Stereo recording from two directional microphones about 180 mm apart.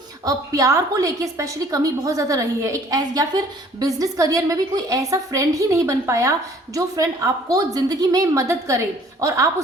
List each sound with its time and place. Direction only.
0.3 s a woman's voice: 20° right (ahead or behind)